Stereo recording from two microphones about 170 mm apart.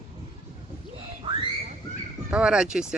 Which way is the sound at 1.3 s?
30° right (ahead or behind).